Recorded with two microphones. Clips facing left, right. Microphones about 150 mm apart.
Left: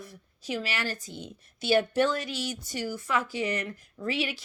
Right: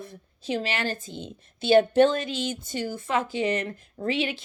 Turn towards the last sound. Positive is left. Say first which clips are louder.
# right 4 dB
turn(degrees=-25)  # may be behind; listen again after turning